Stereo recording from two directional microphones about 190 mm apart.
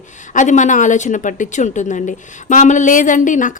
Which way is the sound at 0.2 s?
40° left (ahead or behind).